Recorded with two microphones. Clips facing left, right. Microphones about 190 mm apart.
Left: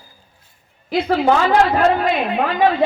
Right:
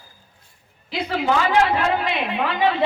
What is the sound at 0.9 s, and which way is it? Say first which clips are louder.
A woman's voice: left 6 dB; 45° left (ahead or behind).